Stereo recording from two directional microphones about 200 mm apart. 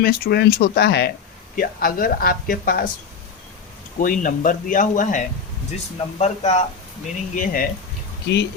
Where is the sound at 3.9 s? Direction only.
40° left (ahead or behind).